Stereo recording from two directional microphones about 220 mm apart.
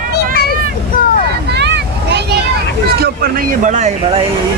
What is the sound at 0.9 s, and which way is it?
Boat, 40° left (ahead or behind).